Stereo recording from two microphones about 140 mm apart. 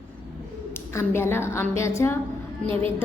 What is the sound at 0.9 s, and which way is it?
A woman's voice, 15° left (ahead or behind).